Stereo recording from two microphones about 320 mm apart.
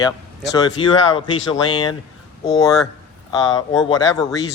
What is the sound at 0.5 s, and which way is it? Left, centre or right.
Speech, centre.